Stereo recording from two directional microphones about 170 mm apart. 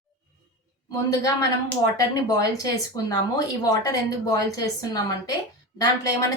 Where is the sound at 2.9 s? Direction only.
25° left (ahead or behind).